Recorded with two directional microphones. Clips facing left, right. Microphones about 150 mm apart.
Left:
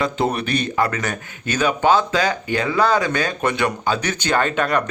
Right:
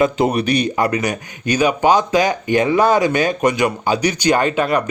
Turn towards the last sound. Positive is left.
turn(degrees=-10)  # may be behind; listen again after turning